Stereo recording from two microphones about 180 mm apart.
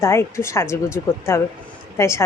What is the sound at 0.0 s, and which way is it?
Speech, 15° left (ahead or behind).